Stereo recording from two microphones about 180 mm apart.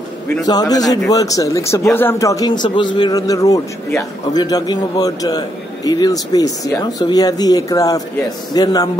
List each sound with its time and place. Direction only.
0.5 s speech: 20° left (ahead or behind)